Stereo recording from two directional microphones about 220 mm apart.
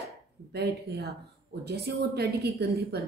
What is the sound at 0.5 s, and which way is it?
A woman's voice, 50° right (ahead or behind).